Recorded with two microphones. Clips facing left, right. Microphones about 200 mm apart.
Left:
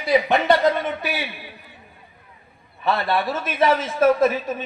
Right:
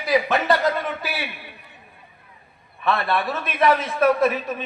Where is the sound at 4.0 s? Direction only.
25° left (ahead or behind).